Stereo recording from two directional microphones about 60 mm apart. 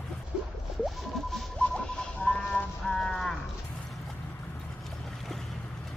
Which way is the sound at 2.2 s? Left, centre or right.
Centre.